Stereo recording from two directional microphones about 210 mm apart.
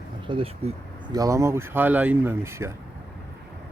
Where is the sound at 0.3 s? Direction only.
25° right (ahead or behind).